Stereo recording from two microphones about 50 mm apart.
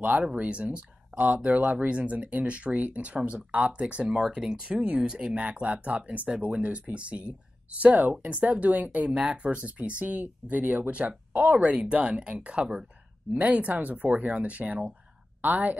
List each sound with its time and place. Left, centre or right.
0.2 s speech: right
4.0 s speech: centre
4.6 s a woman's voice: right